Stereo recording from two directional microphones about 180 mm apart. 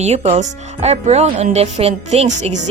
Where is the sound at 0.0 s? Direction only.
40° right (ahead or behind).